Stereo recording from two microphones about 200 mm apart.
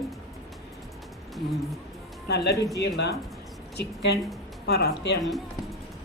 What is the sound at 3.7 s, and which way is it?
A woman's voice, 55° left (ahead or behind).